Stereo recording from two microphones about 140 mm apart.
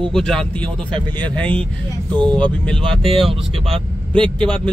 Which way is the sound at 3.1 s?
40° right (ahead or behind).